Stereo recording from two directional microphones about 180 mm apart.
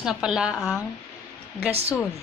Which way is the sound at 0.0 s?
5° right (ahead or behind).